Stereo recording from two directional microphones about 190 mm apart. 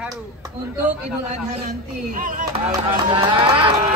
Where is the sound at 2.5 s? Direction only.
30° right (ahead or behind).